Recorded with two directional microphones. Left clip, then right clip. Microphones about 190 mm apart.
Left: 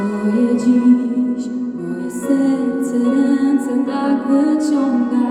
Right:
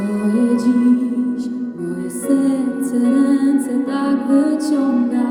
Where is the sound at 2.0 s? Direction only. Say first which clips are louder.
Even; 25° right (ahead or behind).